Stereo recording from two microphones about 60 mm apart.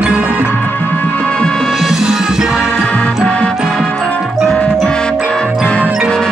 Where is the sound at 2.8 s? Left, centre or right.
Centre.